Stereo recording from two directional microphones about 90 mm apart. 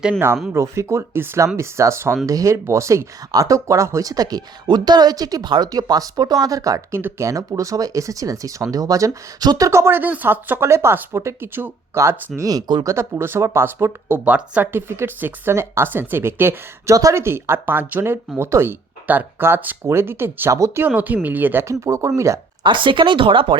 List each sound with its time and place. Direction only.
0.5 s speech: 35° right (ahead or behind)
12.4 s speech: 45° right (ahead or behind)
12.8 s speech: 30° right (ahead or behind)
14.3 s speech: 15° right (ahead or behind)
16.9 s speech: 40° right (ahead or behind)
20.8 s speech: 20° right (ahead or behind); by 22.4 s 35° right (ahead or behind)
22.6 s speech: 65° right (ahead or behind)